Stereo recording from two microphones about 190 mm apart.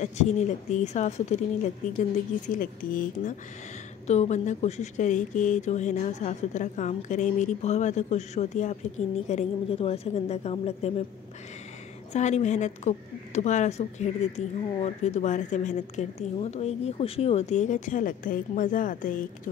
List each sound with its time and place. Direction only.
0.0 s a woman's voice: 35° left (ahead or behind)
12.1 s a woman's voice: 35° left (ahead or behind)